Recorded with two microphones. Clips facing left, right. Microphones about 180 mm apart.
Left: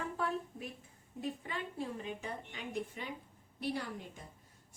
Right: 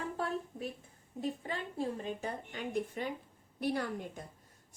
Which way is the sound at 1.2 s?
35° right (ahead or behind).